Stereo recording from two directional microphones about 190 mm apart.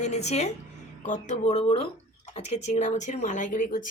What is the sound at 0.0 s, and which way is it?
Speech, 35° left (ahead or behind).